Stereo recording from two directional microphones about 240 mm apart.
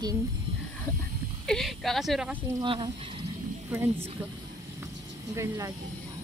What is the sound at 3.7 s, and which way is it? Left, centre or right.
Speech, centre.